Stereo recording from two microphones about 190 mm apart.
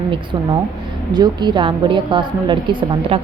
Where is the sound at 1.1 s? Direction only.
20° right (ahead or behind).